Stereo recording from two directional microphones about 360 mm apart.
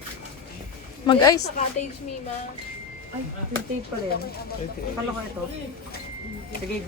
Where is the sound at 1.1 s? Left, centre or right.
Centre.